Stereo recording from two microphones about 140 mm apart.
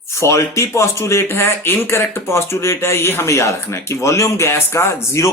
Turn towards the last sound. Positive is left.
turn(degrees=20)  # may be behind; listen again after turning